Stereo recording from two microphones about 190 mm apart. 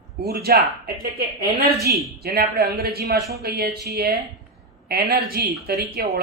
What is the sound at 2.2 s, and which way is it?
Speech, 55° right (ahead or behind).